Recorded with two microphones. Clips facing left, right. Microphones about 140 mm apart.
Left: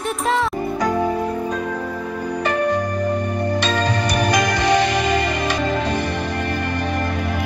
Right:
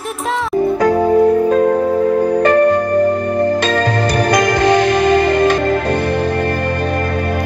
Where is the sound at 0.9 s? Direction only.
50° right (ahead or behind).